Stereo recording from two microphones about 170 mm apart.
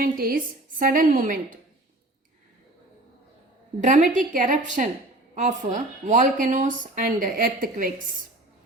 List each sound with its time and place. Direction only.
0.0 s a woman's voice: 60° right (ahead or behind)
3.8 s speech: 45° right (ahead or behind)